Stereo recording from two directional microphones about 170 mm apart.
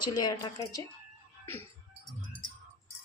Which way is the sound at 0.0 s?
25° left (ahead or behind).